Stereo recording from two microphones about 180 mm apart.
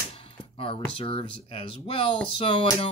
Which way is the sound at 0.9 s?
30° left (ahead or behind).